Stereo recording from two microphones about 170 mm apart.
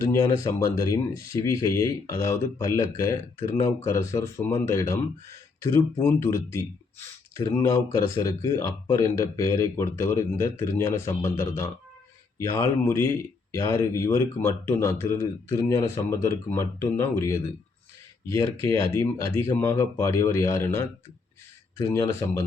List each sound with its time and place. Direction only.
0.0 s speech: 20° left (ahead or behind)